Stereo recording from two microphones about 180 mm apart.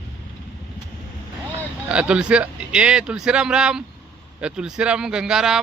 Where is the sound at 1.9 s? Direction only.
5° right (ahead or behind).